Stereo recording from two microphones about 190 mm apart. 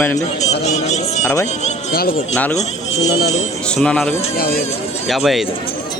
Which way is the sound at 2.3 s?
10° left (ahead or behind).